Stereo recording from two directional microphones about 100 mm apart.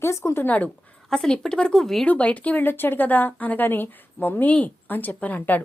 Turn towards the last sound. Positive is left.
turn(degrees=15)  # may be behind; listen again after turning